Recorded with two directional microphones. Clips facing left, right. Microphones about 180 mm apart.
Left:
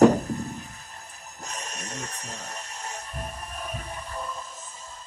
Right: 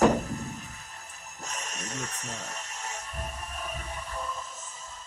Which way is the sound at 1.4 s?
35° left (ahead or behind).